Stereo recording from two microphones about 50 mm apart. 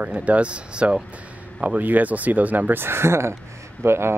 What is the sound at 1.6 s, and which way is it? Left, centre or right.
A man's voice, right.